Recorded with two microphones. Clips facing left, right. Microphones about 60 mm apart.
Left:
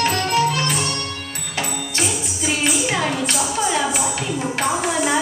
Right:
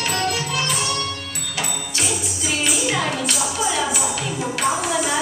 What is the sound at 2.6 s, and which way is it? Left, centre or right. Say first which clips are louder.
Music: left 1 dB; left.